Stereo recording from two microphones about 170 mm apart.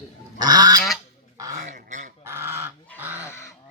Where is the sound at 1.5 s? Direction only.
45° right (ahead or behind).